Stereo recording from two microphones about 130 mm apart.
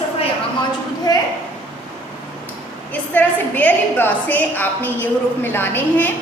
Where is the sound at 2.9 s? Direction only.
10° left (ahead or behind).